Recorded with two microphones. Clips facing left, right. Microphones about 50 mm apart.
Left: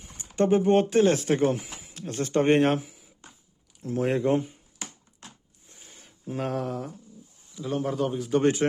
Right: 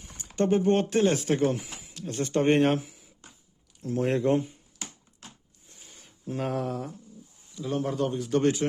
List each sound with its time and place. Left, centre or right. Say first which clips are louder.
0.4 s speech: left 3 dB; centre
1.5 s a sound: left 1 dB; centre
2.0 s speech: even; centre
2.2 s a man's voice: left 1 dB; centre
5.8 s a sound: even; centre
7.5 s a man's voice: left 1 dB; centre